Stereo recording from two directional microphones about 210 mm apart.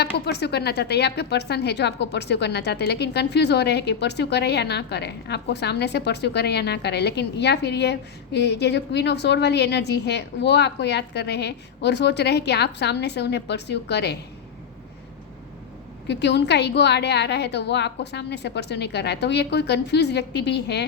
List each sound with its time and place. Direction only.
0.0 s a woman's voice: 50° left (ahead or behind)
16.0 s a woman's voice: 55° left (ahead or behind)